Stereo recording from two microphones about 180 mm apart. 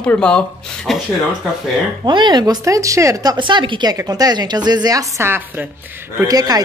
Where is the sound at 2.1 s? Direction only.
25° right (ahead or behind).